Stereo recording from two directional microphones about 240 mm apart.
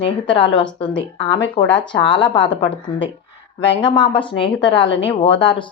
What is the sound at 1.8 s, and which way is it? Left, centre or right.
Speech, centre.